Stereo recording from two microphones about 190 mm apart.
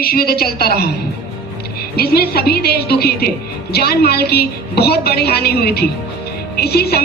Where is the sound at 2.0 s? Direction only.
55° left (ahead or behind).